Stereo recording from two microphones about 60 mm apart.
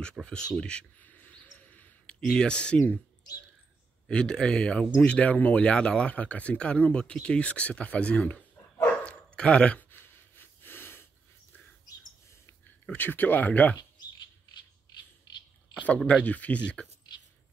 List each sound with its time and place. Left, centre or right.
0.2 s speech: centre
1.0 s bird: left
2.0 s speech: centre
4.1 s speech: centre
9.0 s dog: centre
9.8 s a sound: left
12.9 s speech: left
16.1 s speech: left